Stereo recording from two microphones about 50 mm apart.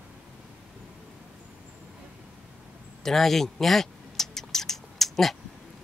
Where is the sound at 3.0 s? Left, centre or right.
Centre.